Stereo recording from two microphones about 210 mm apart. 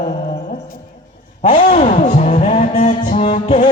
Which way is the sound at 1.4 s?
35° left (ahead or behind).